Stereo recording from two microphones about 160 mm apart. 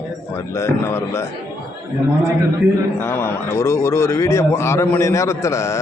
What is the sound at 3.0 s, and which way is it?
A man's voice, 15° left (ahead or behind).